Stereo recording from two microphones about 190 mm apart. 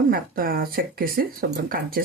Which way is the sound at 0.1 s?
50° right (ahead or behind).